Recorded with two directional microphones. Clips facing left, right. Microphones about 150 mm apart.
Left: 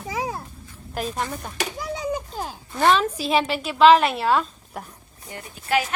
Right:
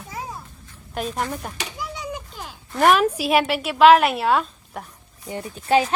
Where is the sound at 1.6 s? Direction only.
45° left (ahead or behind).